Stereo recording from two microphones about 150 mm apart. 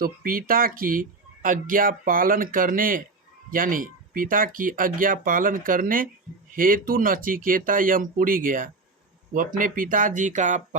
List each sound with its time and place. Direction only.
0.0 s speech: 70° right (ahead or behind); by 10.8 s 55° right (ahead or behind)